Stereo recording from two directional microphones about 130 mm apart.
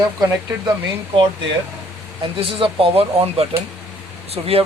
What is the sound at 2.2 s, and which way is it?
Speech, 45° right (ahead or behind).